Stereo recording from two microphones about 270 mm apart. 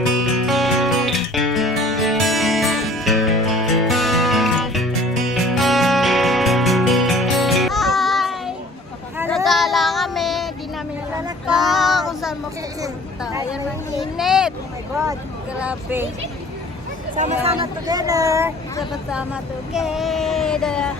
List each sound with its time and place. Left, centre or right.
0.4 s music: centre
9.1 s child singing: centre
13.3 s a sound: centre
15.5 s vehicle: centre
17.2 s speech: right; by 20.9 s centre